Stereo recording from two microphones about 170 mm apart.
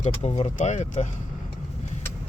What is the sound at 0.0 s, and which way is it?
Speech, 40° left (ahead or behind).